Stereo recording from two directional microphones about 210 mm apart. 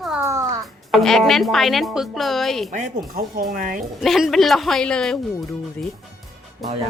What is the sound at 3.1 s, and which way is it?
Speech, 45° right (ahead or behind).